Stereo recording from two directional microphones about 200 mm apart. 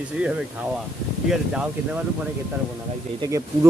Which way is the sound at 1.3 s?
5° right (ahead or behind).